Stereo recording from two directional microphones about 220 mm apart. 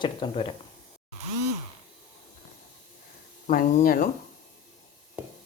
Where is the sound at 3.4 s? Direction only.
35° left (ahead or behind).